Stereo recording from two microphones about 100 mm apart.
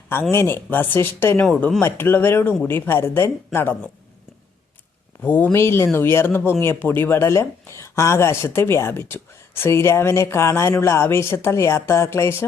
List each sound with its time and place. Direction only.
0.1 s speech: 25° left (ahead or behind)
5.2 s speech: 20° left (ahead or behind)